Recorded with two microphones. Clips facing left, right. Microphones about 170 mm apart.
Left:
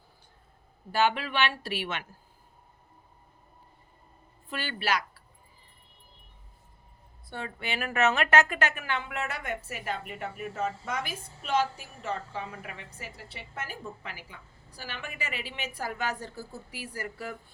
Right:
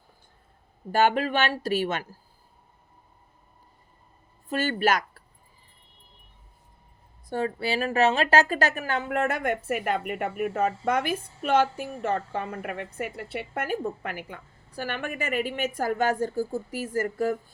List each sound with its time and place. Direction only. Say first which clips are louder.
0.9 s a woman's voice: right 5 dB; 50° right (ahead or behind)
4.4 s speech: right 8 dB; 45° right (ahead or behind)
7.3 s a woman's voice: right 9 dB; 40° right (ahead or behind)